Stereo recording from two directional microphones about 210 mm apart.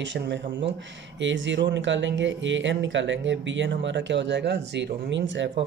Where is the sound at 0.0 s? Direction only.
55° right (ahead or behind).